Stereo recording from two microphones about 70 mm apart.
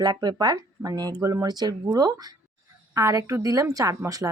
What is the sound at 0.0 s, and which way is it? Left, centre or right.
Speech, right.